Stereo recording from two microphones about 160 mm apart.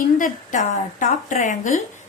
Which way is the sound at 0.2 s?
50° left (ahead or behind).